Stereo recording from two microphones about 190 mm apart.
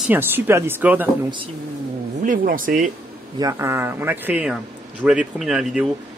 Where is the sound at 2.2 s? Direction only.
45° right (ahead or behind).